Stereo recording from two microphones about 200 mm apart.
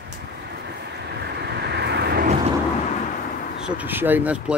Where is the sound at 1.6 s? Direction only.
55° right (ahead or behind).